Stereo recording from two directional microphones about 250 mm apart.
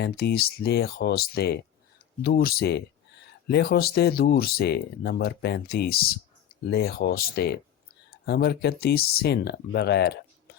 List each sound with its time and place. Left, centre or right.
0.0 s speech: left